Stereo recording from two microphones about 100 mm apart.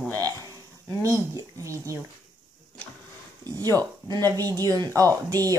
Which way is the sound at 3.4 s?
40° right (ahead or behind).